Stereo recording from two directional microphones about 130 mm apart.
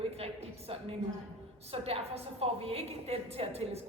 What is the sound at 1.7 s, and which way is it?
A woman's voice, 50° right (ahead or behind).